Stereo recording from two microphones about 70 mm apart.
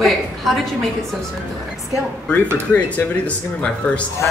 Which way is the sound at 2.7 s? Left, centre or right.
Left.